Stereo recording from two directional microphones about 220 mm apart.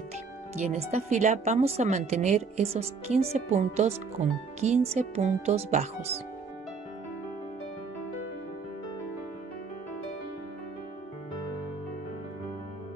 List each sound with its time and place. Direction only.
0.9 s a woman's voice: 30° right (ahead or behind)